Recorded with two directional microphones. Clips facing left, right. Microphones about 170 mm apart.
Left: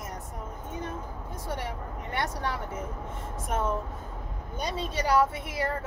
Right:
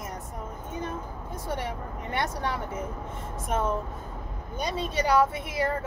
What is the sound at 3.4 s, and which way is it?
Speech, 20° right (ahead or behind).